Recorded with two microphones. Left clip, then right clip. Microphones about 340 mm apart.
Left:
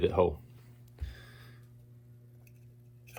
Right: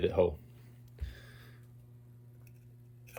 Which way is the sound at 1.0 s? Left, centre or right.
Centre.